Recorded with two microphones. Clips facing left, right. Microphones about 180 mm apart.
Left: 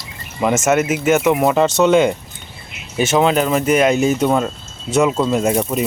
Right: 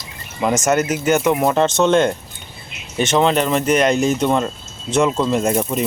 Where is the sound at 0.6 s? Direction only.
Centre (ahead or behind).